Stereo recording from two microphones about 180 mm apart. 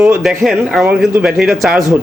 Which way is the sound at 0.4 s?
Centre (ahead or behind).